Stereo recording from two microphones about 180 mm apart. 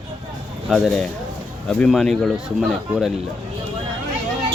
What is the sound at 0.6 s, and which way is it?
Speech, centre (ahead or behind).